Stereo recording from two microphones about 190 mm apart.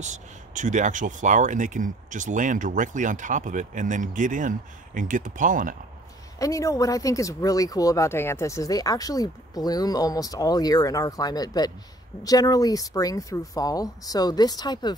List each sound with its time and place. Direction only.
0.0 s speech: 40° right (ahead or behind)
6.4 s speech: 15° left (ahead or behind)